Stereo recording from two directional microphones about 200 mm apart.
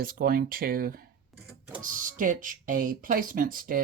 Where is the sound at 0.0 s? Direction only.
45° right (ahead or behind).